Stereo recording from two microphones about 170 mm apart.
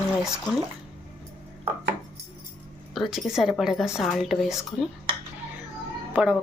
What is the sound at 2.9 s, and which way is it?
A woman's voice, centre (ahead or behind).